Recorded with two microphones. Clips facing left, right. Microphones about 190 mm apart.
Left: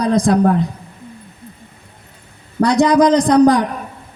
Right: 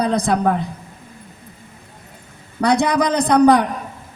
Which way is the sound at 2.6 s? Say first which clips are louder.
Left 5 dB; 60° right (ahead or behind).